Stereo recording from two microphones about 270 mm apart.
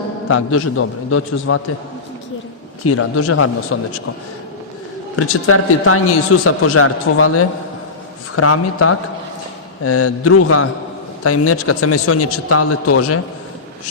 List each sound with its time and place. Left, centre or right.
0.3 s a man's voice: left
2.8 s a man's voice: left
5.1 s a man's voice: left